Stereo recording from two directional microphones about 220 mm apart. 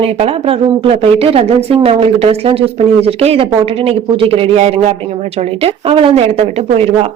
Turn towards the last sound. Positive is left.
turn(degrees=-30)  # may be behind; listen again after turning